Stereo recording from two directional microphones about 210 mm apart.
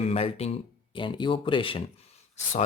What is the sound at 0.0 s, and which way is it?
Speech, 30° left (ahead or behind).